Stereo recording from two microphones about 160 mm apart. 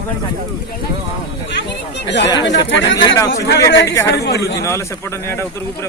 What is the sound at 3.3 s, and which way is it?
Speech, 85° left.